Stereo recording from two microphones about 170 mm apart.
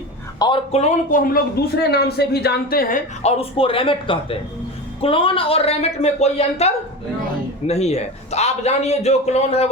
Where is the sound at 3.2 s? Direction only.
35° left (ahead or behind).